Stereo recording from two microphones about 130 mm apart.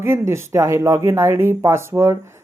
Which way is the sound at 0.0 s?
20° right (ahead or behind).